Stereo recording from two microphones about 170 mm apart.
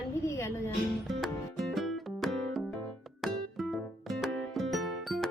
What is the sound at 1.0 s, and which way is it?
Music, centre (ahead or behind).